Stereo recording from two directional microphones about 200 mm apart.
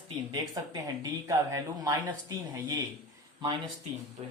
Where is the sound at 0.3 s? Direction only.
20° right (ahead or behind).